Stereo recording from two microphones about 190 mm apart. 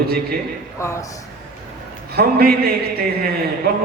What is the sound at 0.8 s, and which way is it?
Speech, 15° left (ahead or behind).